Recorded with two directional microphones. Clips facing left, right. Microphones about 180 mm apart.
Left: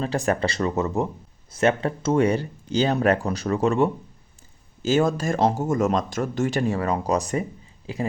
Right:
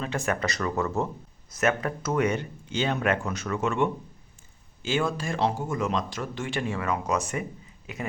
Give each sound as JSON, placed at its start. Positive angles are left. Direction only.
{"t": 0.0, "sound": "speech", "side_deg": 35}
{"t": 1.5, "sound": "speech", "side_deg": 30}